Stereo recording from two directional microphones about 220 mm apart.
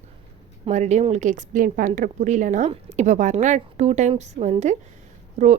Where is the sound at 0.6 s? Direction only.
30° right (ahead or behind).